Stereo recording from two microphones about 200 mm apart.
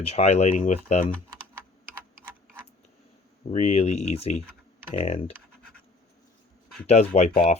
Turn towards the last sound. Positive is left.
turn(degrees=35)  # may be behind; listen again after turning